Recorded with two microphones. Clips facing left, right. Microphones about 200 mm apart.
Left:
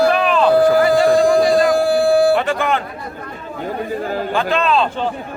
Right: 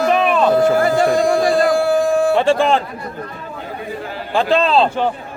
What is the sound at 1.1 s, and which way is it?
Speech, 35° left (ahead or behind).